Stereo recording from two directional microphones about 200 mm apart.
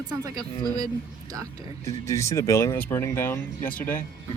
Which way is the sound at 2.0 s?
15° left (ahead or behind).